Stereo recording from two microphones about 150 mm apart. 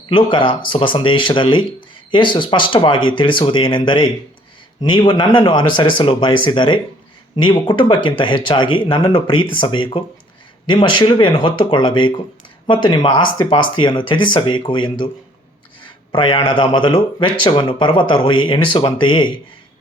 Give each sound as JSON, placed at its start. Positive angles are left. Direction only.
{"t": 0.1, "sound": "speech", "side_deg": 35}
{"t": 16.1, "sound": "speech", "side_deg": 35}